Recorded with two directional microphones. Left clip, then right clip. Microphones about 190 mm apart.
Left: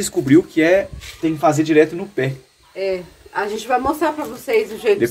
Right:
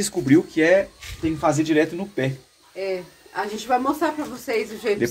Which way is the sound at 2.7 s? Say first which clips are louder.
Left 5 dB; 15° left (ahead or behind).